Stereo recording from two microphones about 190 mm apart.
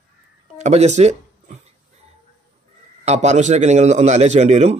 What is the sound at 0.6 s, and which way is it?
Speech, 35° right (ahead or behind).